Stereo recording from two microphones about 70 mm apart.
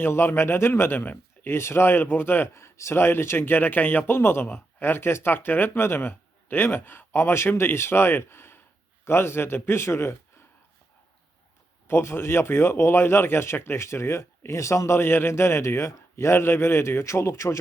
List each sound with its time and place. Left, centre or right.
0.0 s a man's voice: left
11.9 s a man's voice: left